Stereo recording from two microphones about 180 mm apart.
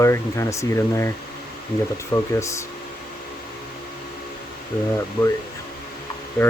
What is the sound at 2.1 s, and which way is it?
Speech, 15° left (ahead or behind).